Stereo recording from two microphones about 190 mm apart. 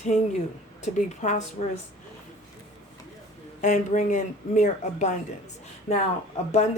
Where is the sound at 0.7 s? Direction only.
40° left (ahead or behind).